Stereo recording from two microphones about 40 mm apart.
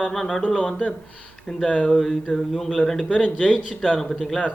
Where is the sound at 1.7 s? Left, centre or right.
Left.